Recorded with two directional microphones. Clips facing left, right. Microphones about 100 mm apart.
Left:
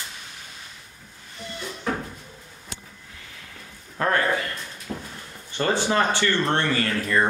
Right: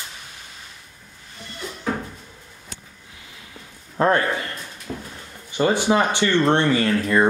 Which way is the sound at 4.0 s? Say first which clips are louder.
Right 3 dB; 25° right (ahead or behind).